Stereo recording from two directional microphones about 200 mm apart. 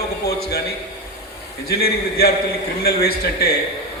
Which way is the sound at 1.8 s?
50° left (ahead or behind).